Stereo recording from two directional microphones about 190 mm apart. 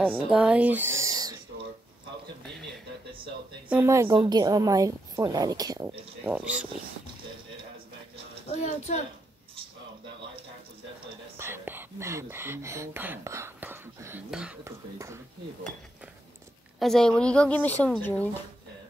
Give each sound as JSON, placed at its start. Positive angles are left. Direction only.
{"t": 0.0, "sound": "speech", "side_deg": -5}
{"t": 3.6, "sound": "a woman's voice", "side_deg": -10}
{"t": 5.9, "sound": "speech", "side_deg": -10}
{"t": 8.5, "sound": "speech", "side_deg": 35}
{"t": 11.3, "sound": "speech", "side_deg": -10}
{"t": 16.8, "sound": "a woman's voice", "side_deg": 5}